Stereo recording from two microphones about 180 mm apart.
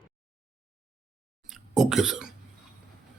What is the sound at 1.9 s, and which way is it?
Speech, 5° right (ahead or behind).